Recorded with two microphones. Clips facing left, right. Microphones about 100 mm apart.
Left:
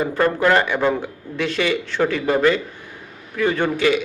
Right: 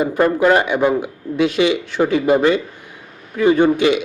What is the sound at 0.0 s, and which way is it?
A man's voice, 20° right (ahead or behind).